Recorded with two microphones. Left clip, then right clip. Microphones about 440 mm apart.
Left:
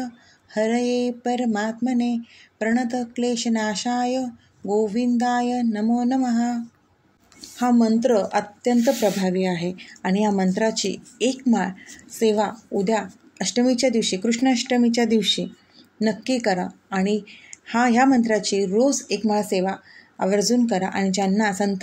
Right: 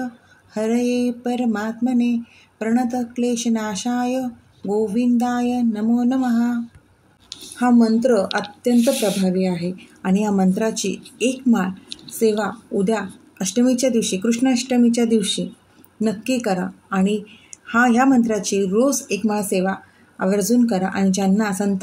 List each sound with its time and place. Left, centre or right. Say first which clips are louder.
0.0 s speech: right 3 dB; centre
4.1 s speech: right 1 dB; centre
11.5 s speech: right 1 dB; right
13.7 s speech: right 1 dB; centre
14.2 s a woman's voice: right 1 dB; right
19.6 s a woman's voice: right 2 dB; right